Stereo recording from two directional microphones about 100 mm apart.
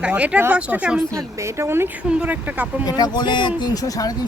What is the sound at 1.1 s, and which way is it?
Speech, 30° right (ahead or behind).